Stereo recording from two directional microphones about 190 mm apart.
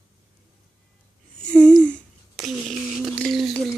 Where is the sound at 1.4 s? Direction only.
5° left (ahead or behind).